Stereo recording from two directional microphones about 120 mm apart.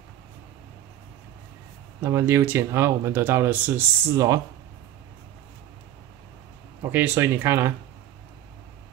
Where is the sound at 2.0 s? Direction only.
20° right (ahead or behind).